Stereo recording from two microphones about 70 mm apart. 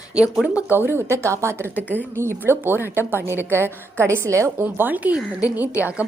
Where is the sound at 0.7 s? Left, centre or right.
Right.